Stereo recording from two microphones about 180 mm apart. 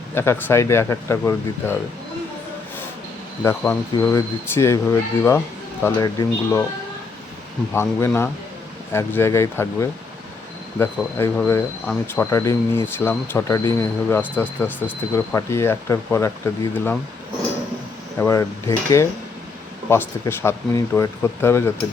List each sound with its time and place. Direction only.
0.1 s speech: 15° left (ahead or behind)
3.4 s speech: 10° left (ahead or behind)
7.7 s speech: 15° left (ahead or behind)
18.2 s speech: 15° left (ahead or behind)
19.9 s speech: 15° left (ahead or behind)